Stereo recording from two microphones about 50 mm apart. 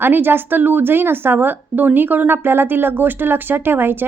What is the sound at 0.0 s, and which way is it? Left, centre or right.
A woman's voice, right.